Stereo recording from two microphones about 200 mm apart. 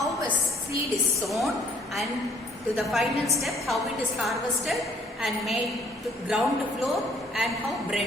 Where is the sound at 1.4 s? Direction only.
Centre (ahead or behind).